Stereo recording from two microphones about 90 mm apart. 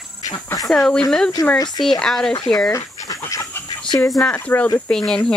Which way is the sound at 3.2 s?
35° left (ahead or behind).